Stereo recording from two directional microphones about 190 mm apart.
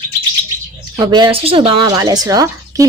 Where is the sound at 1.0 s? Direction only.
20° right (ahead or behind).